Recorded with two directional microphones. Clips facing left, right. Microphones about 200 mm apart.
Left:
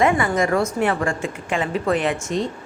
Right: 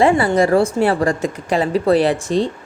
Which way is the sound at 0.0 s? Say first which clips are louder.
Right 5 dB; 30° right (ahead or behind).